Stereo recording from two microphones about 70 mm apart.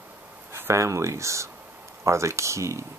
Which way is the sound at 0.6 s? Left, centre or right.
Right.